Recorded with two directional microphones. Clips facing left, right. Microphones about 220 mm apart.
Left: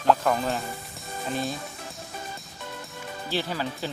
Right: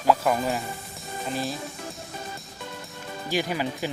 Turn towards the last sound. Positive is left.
turn(degrees=-15)  # may be behind; listen again after turning